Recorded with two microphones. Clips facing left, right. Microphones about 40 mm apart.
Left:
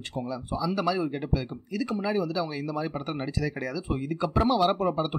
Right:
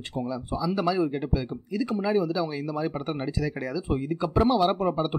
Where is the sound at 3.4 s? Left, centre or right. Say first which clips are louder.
Right 1 dB; centre.